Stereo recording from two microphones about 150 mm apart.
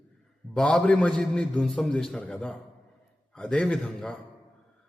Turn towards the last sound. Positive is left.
turn(degrees=5)  # may be behind; listen again after turning